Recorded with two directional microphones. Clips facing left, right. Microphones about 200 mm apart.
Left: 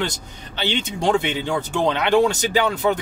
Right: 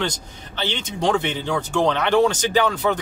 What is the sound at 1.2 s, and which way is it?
Speech, 10° left (ahead or behind).